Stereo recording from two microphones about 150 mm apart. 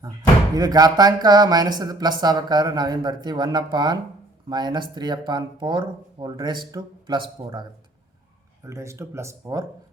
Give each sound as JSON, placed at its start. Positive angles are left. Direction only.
{"t": 0.5, "sound": "speech", "side_deg": -25}